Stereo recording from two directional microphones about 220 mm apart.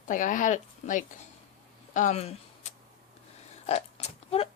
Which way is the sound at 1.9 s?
30° left (ahead or behind).